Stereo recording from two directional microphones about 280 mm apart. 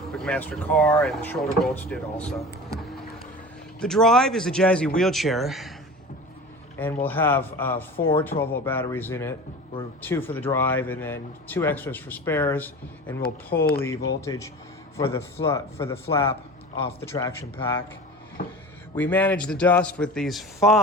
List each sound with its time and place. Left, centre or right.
0.1 s speech: centre
3.8 s speech: centre
6.7 s speech: centre
18.9 s speech: centre